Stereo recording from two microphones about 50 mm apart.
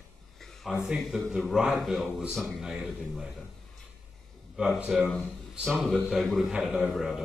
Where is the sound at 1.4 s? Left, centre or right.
Centre.